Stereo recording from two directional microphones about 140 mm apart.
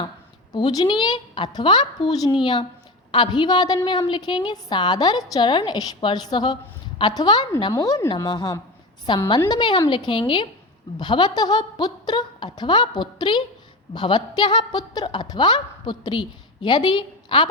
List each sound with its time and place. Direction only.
0.5 s a woman's voice: 30° left (ahead or behind)